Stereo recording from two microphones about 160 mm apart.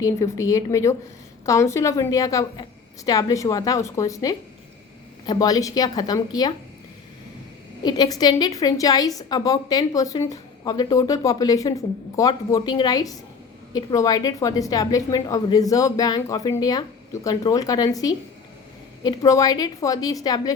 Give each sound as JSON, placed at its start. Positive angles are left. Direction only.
{"t": 0.0, "sound": "a woman's voice", "side_deg": 20}
{"t": 7.9, "sound": "a woman's voice", "side_deg": 25}